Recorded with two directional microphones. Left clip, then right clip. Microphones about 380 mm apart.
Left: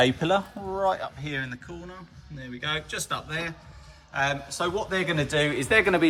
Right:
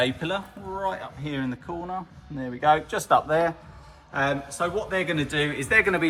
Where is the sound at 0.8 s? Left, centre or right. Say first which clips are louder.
Left 4 dB; centre.